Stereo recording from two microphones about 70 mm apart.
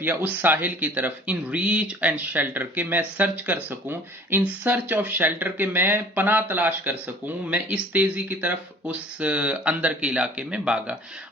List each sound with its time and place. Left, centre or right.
0.0 s speech: right